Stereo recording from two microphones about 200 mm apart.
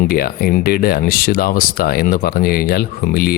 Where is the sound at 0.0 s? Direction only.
45° left (ahead or behind).